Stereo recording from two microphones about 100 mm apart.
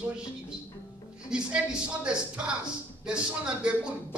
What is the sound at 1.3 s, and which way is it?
Speech, 10° right (ahead or behind).